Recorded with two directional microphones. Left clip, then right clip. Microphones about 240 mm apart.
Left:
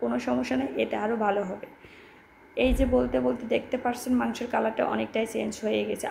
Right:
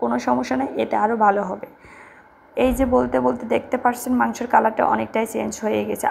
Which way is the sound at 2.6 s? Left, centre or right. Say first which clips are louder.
Right 6 dB; centre.